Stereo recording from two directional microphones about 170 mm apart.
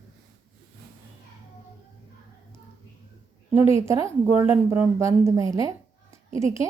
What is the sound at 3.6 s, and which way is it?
Speech, 35° left (ahead or behind).